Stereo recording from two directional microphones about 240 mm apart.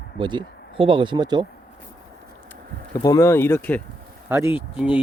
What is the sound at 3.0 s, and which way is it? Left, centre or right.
Speech, centre.